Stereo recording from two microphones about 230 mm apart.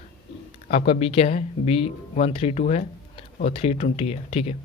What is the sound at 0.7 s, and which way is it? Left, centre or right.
Speech, left.